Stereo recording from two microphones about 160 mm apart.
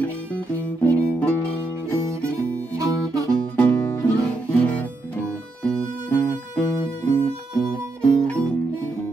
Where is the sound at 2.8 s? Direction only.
20° right (ahead or behind).